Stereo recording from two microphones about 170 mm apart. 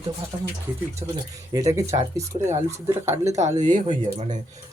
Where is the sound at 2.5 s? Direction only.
40° right (ahead or behind).